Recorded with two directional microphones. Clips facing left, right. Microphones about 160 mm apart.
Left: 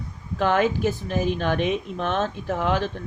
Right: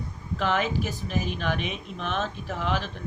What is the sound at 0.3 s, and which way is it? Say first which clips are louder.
Speech: left 5 dB; 50° left (ahead or behind).